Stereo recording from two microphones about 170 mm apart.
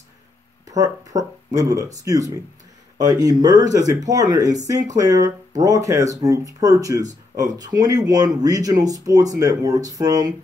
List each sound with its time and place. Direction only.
0.7 s speech: 20° right (ahead or behind)